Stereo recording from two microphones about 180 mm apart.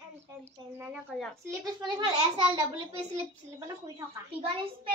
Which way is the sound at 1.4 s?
25° right (ahead or behind).